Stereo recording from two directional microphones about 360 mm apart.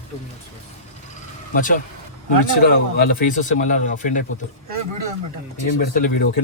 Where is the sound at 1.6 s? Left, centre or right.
Left.